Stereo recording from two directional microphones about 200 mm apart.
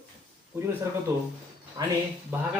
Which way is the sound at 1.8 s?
20° right (ahead or behind).